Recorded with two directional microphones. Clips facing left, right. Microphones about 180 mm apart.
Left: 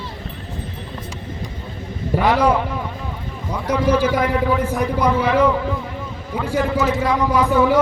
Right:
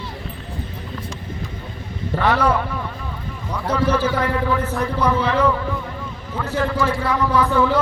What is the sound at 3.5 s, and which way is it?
A man's voice, 10° left (ahead or behind).